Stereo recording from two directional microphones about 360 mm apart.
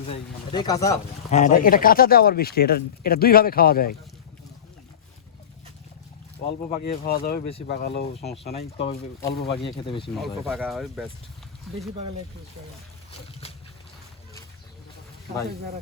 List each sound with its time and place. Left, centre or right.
0.1 s speech: centre
1.4 s speech: left
6.7 s speech: left
10.2 s speech: centre
13.4 s boat: centre